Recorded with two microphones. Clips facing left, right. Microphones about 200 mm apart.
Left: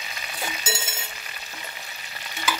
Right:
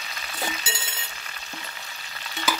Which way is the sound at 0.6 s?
45° left (ahead or behind).